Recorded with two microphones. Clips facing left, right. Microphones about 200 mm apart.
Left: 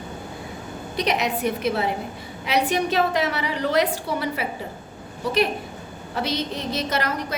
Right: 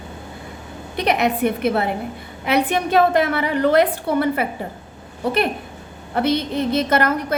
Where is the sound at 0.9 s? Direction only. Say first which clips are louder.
Right 4 dB; 55° right (ahead or behind).